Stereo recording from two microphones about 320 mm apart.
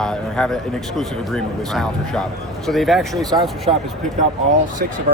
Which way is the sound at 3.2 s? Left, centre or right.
Centre.